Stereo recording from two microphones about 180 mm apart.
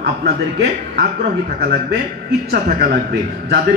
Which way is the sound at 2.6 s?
70° right (ahead or behind).